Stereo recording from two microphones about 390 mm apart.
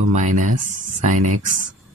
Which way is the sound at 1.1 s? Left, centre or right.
Right.